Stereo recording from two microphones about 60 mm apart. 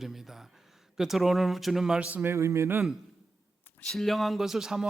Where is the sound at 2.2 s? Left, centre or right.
Right.